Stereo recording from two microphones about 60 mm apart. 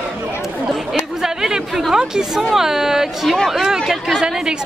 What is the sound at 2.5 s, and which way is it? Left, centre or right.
Speech, centre.